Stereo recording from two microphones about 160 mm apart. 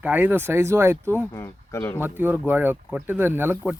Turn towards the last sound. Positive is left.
turn(degrees=-15)  # may be behind; listen again after turning